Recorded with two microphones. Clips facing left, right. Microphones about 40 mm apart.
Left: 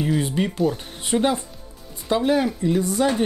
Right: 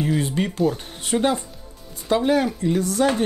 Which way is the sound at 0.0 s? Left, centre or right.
Centre.